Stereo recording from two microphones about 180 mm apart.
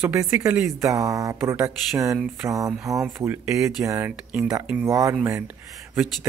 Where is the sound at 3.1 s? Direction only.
15° right (ahead or behind).